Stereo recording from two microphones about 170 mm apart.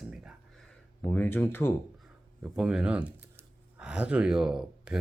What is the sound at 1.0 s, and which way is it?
Speech, 10° left (ahead or behind).